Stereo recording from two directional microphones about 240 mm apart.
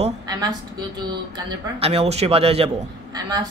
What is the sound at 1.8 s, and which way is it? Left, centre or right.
A woman's voice, right.